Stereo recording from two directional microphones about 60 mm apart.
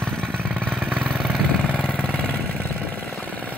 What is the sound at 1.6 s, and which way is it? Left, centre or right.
Vehicle, left.